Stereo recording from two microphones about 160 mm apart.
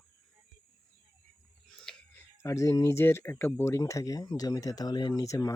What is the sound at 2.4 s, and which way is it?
Speech, 20° left (ahead or behind).